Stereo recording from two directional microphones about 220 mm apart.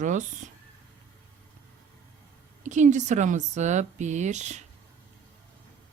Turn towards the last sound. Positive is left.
turn(degrees=-30)  # may be behind; listen again after turning